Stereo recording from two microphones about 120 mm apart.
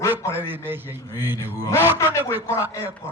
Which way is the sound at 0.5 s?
15° right (ahead or behind).